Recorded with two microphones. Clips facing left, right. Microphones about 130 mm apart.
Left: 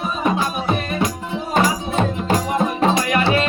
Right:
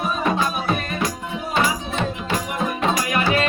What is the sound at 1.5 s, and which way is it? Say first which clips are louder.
Music: left 3 dB; 40° left (ahead or behind).